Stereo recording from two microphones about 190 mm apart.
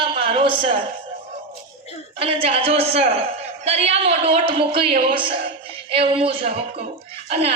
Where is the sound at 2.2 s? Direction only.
30° right (ahead or behind).